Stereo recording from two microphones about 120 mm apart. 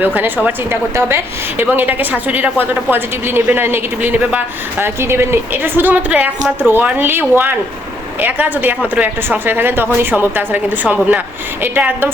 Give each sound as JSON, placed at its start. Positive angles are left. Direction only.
{"t": 0.0, "sound": "a woman's voice", "side_deg": -15}